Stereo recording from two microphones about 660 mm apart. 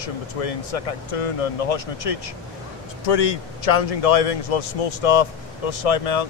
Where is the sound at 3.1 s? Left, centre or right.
Left.